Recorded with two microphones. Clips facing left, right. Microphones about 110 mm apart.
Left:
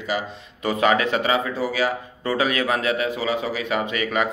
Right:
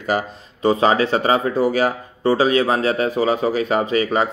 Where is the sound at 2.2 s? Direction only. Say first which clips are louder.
Right 6 dB; 30° right (ahead or behind).